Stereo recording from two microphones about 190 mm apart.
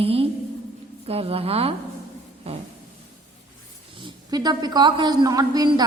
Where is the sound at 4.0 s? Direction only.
25° right (ahead or behind).